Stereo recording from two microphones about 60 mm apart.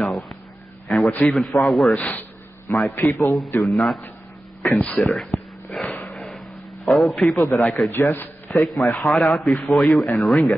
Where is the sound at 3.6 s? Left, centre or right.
Centre.